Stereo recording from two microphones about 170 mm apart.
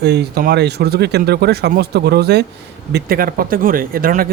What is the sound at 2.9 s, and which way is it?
Speech, 60° right (ahead or behind).